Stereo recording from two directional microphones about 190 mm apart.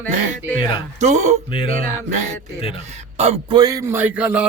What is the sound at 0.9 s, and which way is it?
Speech, 40° right (ahead or behind).